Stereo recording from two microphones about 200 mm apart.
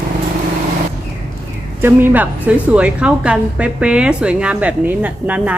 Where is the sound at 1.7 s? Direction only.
10° right (ahead or behind).